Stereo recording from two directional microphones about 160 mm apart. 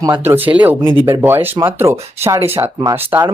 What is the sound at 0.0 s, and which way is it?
Speech, 20° right (ahead or behind).